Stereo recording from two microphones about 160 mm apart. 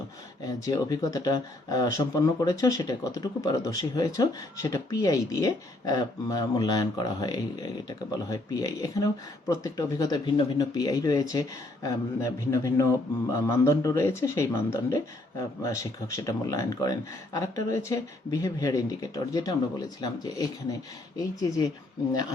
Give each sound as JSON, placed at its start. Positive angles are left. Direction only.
{"t": 0.4, "sound": "speech", "side_deg": 20}